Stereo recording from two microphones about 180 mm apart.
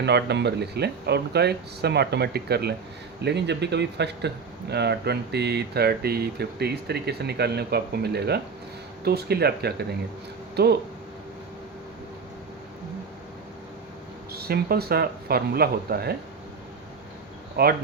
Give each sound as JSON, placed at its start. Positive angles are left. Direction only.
{"t": 0.0, "sound": "speech", "side_deg": -70}
{"t": 14.3, "sound": "speech", "side_deg": -60}
{"t": 17.6, "sound": "speech", "side_deg": -60}